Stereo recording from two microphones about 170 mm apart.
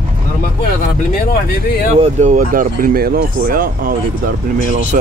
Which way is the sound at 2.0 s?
45° right (ahead or behind).